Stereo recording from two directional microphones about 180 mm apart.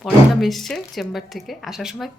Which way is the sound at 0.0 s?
Centre (ahead or behind).